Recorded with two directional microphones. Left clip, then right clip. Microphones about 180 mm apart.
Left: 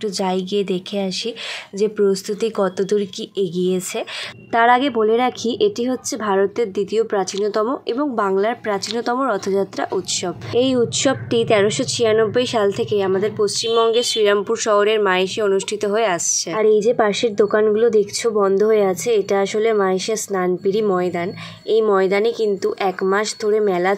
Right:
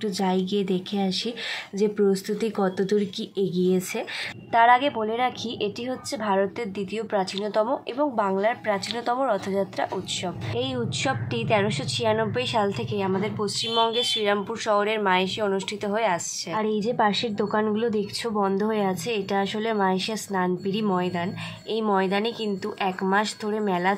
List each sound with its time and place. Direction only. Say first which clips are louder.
0.0 s a woman's voice: left 4 dB; 25° left (ahead or behind)